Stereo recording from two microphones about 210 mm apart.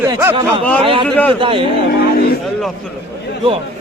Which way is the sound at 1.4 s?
25° right (ahead or behind).